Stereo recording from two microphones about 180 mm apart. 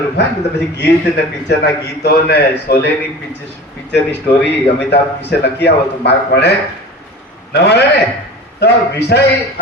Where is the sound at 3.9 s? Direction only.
70° left (ahead or behind).